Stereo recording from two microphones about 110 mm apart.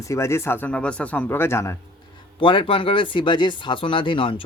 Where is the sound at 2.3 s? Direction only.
50° left (ahead or behind).